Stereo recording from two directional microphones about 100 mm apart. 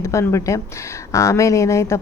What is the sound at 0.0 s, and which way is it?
A woman's voice, 30° left (ahead or behind).